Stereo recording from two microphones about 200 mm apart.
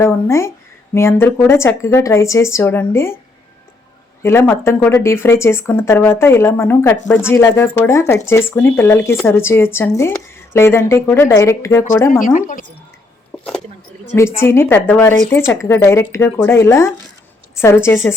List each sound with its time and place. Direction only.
0.0 s speech: 15° left (ahead or behind)
4.2 s speech: 10° left (ahead or behind)
12.2 s a woman's voice: 40° left (ahead or behind)
14.3 s a woman's voice: 10° left (ahead or behind)